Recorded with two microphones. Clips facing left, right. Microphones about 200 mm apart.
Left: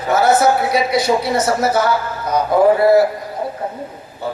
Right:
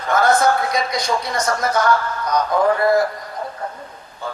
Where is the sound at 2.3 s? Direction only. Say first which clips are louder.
Left 5 dB; 25° left (ahead or behind).